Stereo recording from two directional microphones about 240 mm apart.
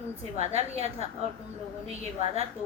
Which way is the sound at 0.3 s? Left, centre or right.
Right.